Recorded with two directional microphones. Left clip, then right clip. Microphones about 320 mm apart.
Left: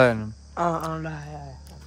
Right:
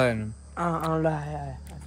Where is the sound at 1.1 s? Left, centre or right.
Right.